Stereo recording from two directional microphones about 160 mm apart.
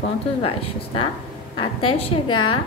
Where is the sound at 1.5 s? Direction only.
35° left (ahead or behind).